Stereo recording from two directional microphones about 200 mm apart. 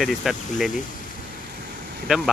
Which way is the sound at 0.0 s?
Centre (ahead or behind).